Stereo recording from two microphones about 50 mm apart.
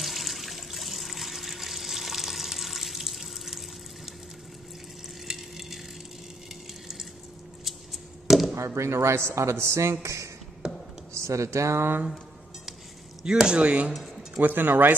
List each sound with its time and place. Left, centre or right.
0.0 s water: centre
5.3 s a sound: centre
7.6 s chop: centre
8.5 s speech: right
10.0 s speech: right
13.2 s speech: centre
13.6 s speech: right
14.4 s speech: right